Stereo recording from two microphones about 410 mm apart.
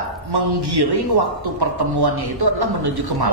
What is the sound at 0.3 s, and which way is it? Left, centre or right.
A man's voice, right.